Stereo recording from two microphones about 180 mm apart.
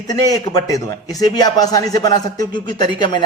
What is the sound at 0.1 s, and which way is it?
A man's voice, 20° left (ahead or behind).